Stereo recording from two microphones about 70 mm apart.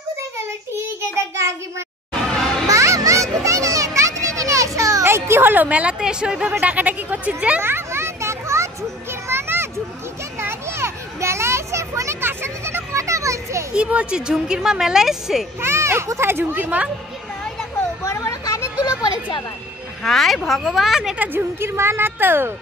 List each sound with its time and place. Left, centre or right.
1.1 s child singing: right
2.7 s children playing: right
5.0 s a woman's voice: right; by 6.5 s centre
6.6 s a woman's voice: right
7.6 s children playing: right
13.7 s speech: centre
15.6 s a woman's voice: right
18.0 s vehicle: left
18.8 s a sound: left
20.0 s a woman's voice: centre
21.2 s a woman's voice: right